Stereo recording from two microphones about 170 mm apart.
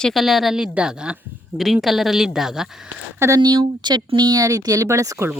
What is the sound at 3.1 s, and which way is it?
Speech, 15° right (ahead or behind).